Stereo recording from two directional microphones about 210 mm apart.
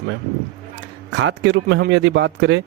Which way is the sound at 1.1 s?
60° right (ahead or behind).